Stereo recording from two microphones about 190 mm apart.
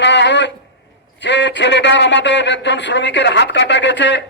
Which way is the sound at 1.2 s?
65° left (ahead or behind).